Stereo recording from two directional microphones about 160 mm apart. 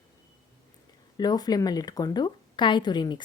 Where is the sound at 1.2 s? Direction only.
25° left (ahead or behind).